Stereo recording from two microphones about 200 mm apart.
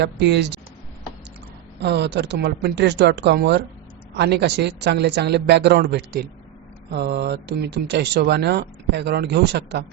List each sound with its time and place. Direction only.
0.0 s speech: 60° right (ahead or behind)
1.8 s speech: 55° right (ahead or behind)